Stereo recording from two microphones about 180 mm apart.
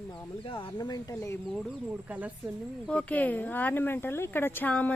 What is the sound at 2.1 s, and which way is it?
Speech, 10° right (ahead or behind).